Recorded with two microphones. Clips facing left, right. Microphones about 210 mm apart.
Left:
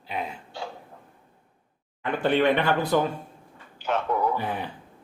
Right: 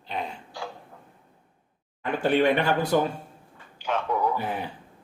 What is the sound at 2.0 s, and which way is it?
Speech, 10° right (ahead or behind).